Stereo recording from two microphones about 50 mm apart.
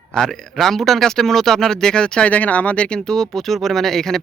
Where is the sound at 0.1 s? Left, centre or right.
Centre.